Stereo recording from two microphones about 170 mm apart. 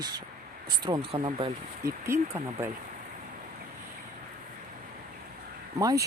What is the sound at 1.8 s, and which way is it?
Speech, 15° right (ahead or behind).